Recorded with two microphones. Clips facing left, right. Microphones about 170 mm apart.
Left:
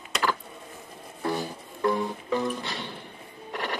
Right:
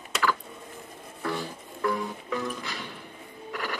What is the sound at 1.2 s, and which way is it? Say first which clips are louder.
Music: left 3 dB; 30° left (ahead or behind).